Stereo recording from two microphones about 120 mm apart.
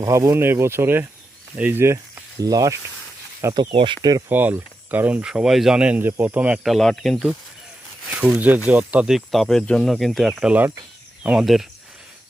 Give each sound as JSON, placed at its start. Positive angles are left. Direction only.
{"t": 0.0, "sound": "speech", "side_deg": -25}
{"t": 3.5, "sound": "speech", "side_deg": -45}
{"t": 4.3, "sound": "speech", "side_deg": -15}
{"t": 6.6, "sound": "speech", "side_deg": 0}